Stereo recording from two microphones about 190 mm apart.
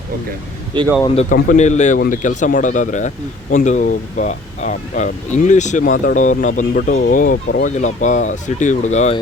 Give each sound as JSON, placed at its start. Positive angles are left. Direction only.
{"t": 1.0, "sound": "speech", "side_deg": 35}